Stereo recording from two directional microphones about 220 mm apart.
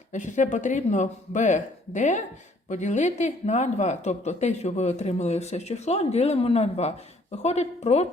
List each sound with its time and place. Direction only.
0.1 s a woman's voice: 35° left (ahead or behind)